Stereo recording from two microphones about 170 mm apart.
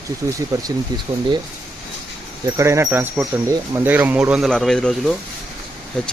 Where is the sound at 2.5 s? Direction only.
15° right (ahead or behind).